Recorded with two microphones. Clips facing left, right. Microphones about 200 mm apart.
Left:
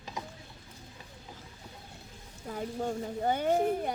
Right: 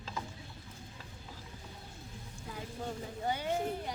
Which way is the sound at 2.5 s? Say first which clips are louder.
Left 7 dB; 45° left (ahead or behind).